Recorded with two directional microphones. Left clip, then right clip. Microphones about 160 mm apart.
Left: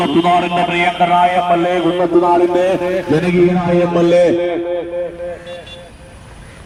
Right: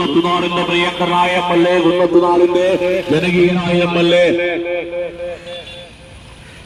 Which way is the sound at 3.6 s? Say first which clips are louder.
Left 1 dB; 30° left (ahead or behind).